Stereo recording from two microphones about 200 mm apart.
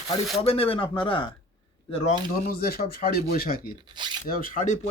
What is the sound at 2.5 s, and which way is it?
Speech, 50° left (ahead or behind).